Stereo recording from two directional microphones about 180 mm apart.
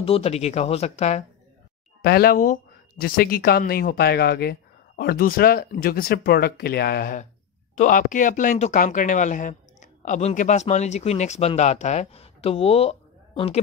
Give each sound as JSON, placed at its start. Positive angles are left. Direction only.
{"t": 0.0, "sound": "speech", "side_deg": 35}
{"t": 2.0, "sound": "speech", "side_deg": 60}
{"t": 7.7, "sound": "speech", "side_deg": 45}